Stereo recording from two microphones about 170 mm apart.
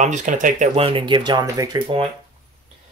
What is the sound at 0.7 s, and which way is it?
Speech, 30° right (ahead or behind).